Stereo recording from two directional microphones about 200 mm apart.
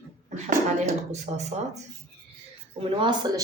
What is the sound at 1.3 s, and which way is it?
Speech, 35° right (ahead or behind).